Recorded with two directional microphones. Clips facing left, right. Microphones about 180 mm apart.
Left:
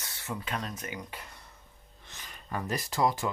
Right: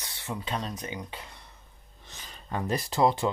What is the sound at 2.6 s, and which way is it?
Speech, 25° right (ahead or behind).